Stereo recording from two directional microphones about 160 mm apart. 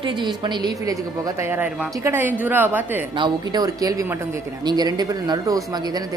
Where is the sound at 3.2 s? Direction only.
25° right (ahead or behind).